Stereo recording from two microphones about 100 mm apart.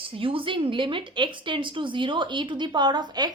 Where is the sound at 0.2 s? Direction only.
65° right (ahead or behind).